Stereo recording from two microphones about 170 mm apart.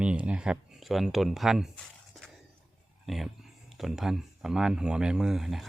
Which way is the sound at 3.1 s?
Centre (ahead or behind).